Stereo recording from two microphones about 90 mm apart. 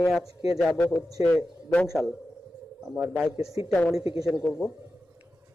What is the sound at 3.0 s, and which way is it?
Speech, 20° right (ahead or behind).